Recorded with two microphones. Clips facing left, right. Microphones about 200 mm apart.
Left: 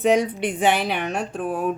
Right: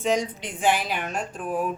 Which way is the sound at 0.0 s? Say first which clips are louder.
Left 6 dB; 60° left (ahead or behind).